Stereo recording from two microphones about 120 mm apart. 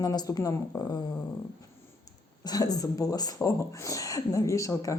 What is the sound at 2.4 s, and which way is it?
Speech, 30° left (ahead or behind).